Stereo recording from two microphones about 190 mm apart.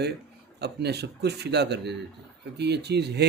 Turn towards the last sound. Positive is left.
turn(degrees=-60)  # may be behind; listen again after turning